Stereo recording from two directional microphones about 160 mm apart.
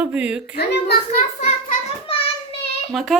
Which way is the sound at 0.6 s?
90° left.